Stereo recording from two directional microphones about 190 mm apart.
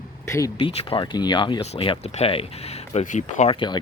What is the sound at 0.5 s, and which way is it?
Speech, 25° left (ahead or behind).